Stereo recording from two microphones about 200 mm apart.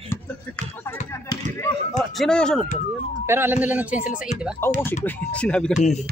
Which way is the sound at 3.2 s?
10° right (ahead or behind).